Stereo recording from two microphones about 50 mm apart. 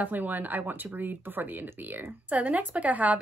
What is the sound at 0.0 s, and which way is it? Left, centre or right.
Speech, right.